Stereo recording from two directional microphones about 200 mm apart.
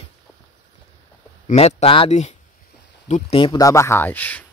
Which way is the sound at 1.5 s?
35° left (ahead or behind).